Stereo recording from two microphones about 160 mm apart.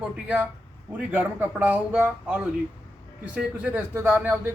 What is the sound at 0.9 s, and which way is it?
A man's voice, 10° right (ahead or behind).